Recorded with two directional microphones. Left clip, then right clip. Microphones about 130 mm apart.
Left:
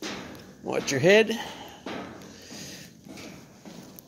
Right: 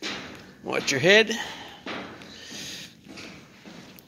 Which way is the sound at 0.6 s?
20° left (ahead or behind).